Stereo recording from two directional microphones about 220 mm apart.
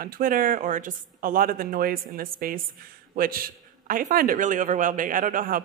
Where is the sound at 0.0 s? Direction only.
40° right (ahead or behind).